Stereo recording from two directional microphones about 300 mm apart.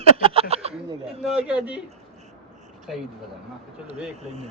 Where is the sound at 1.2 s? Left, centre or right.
Centre.